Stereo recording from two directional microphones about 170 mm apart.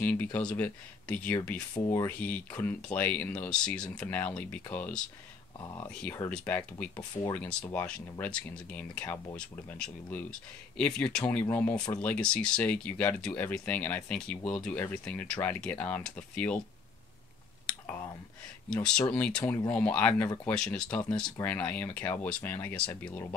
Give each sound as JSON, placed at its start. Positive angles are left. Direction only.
{"t": 0.0, "sound": "speech", "side_deg": 10}
{"t": 1.8, "sound": "speech", "side_deg": 20}
{"t": 2.0, "sound": "speech", "side_deg": 10}
{"t": 5.6, "sound": "speech", "side_deg": 25}
{"t": 5.9, "sound": "speech", "side_deg": 5}
{"t": 17.6, "sound": "a sound", "side_deg": 10}
{"t": 18.7, "sound": "speech", "side_deg": 5}